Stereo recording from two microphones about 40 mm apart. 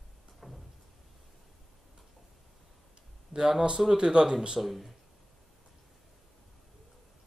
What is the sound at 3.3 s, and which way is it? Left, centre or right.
Speech, centre.